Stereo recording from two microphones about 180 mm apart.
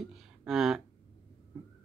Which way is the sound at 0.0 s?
Centre (ahead or behind).